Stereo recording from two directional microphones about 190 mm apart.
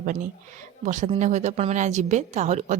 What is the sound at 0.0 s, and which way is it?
Speech, 45° right (ahead or behind).